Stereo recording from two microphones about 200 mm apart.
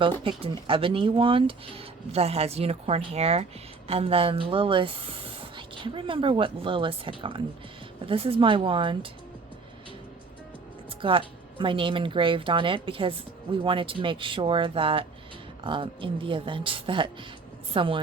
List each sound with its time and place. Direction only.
0.3 s a woman's voice: 25° right (ahead or behind)
10.8 s a woman's voice: 25° right (ahead or behind)